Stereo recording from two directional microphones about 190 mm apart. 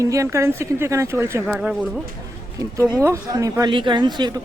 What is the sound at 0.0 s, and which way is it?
Speech, 15° right (ahead or behind).